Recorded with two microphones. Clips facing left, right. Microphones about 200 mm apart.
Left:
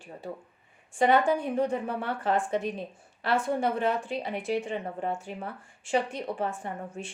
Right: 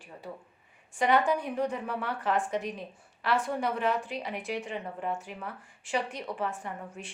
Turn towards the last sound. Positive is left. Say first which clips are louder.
# left 3 dB
turn(degrees=25)  # may be behind; listen again after turning